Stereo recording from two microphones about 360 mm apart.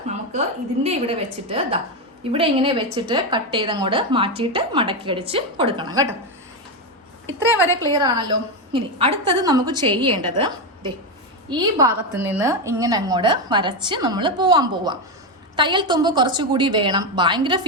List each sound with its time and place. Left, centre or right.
0.1 s a woman's voice: centre
7.4 s a woman's voice: centre
7.9 s a woman's voice: centre